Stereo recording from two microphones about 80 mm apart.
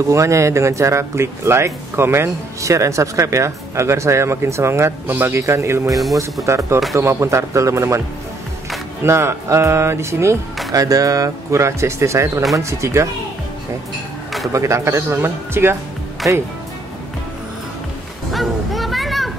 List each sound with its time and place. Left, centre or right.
0.1 s a man's voice: right
9.0 s speech: right
10.7 s speech: right
14.5 s speech: right
18.3 s a sound: centre